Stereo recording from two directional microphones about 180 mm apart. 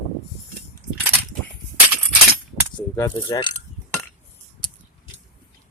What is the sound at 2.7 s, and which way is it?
Speech, 15° left (ahead or behind).